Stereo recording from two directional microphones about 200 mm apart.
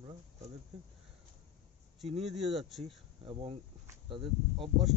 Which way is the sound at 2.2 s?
Centre (ahead or behind).